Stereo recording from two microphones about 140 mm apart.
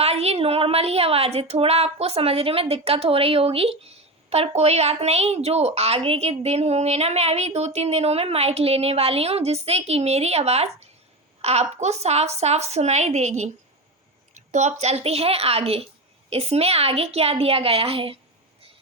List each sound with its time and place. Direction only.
0.0 s a woman's voice: 50° right (ahead or behind)